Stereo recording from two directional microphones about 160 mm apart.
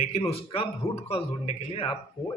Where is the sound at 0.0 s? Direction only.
35° left (ahead or behind).